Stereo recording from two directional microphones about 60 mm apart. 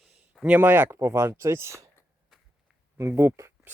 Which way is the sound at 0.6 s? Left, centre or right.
Right.